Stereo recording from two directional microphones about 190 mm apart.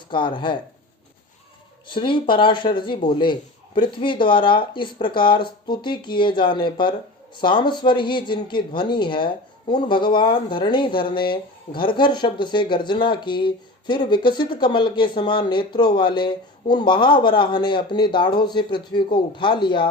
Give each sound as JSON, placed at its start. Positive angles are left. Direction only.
{"t": 0.1, "sound": "speech", "side_deg": 25}
{"t": 1.9, "sound": "speech", "side_deg": 25}